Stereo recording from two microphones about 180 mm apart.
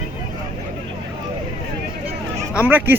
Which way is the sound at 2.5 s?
10° right (ahead or behind).